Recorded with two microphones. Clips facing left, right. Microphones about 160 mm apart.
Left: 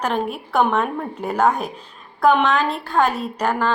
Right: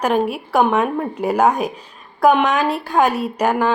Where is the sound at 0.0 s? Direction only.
10° right (ahead or behind).